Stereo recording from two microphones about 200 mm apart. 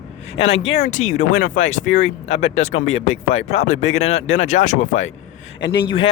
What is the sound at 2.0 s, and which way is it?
Speech, 70° left (ahead or behind).